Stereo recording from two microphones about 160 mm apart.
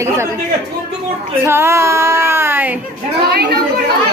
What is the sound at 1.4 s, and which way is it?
A man's voice, 15° right (ahead or behind).